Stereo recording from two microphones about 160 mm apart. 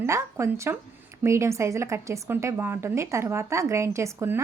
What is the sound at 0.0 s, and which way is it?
A woman's voice, 15° right (ahead or behind).